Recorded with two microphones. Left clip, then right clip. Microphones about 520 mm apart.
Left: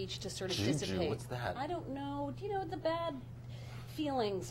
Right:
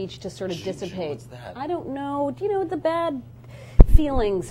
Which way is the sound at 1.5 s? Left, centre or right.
Right.